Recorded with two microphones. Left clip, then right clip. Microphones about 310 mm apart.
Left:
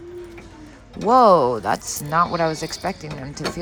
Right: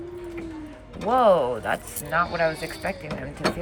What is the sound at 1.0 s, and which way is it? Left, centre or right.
Speech, centre.